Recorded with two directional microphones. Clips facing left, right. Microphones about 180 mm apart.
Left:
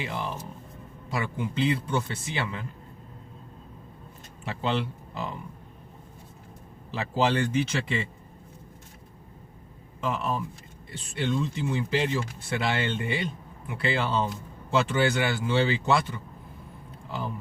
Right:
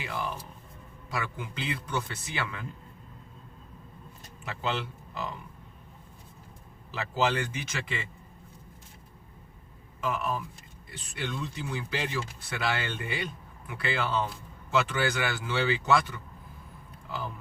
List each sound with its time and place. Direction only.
0.0 s speech: 30° left (ahead or behind)
4.4 s speech: 25° left (ahead or behind)
6.9 s speech: 30° left (ahead or behind)
10.0 s speech: 30° left (ahead or behind)